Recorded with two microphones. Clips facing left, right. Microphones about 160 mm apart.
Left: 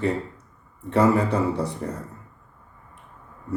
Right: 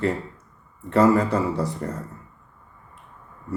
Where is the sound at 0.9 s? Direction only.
15° left (ahead or behind).